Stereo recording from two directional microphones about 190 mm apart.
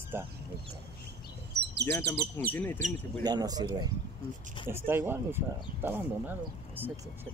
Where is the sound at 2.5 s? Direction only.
10° left (ahead or behind).